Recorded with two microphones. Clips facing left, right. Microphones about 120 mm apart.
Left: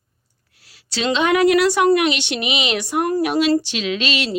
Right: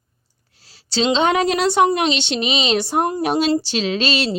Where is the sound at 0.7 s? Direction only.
30° right (ahead or behind).